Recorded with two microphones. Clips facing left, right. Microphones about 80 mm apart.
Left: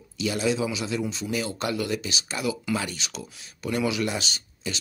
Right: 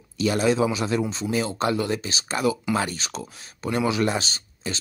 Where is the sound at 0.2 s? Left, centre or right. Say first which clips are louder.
Right 5 dB; right.